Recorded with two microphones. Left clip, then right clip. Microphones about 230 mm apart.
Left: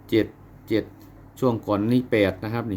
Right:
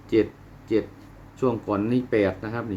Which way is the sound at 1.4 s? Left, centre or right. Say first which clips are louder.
Left 1 dB; left.